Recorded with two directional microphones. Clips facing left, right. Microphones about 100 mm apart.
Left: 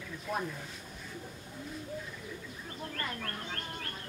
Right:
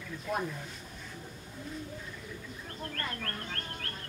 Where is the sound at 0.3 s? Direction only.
5° right (ahead or behind).